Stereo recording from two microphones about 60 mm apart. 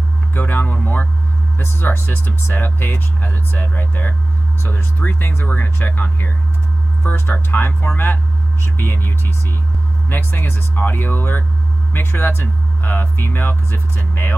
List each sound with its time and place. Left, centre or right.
0.3 s speech: left
7.6 s speech: left